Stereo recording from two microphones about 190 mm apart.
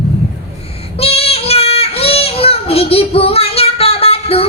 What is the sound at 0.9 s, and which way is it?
Child singing, 30° left (ahead or behind).